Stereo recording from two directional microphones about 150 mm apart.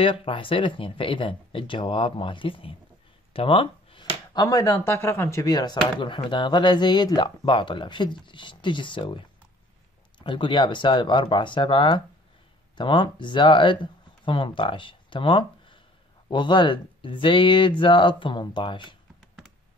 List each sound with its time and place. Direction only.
0.0 s speech: 35° left (ahead or behind)
3.3 s a sound: 35° left (ahead or behind)
4.3 s speech: 25° left (ahead or behind)